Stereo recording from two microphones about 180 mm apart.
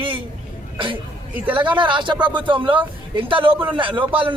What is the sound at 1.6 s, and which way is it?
Speech, 25° right (ahead or behind).